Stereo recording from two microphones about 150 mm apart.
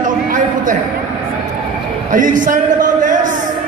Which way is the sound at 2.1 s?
60° right (ahead or behind).